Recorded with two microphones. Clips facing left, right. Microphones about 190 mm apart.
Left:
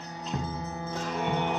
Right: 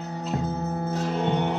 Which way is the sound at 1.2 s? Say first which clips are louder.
Right 3 dB; 25° right (ahead or behind).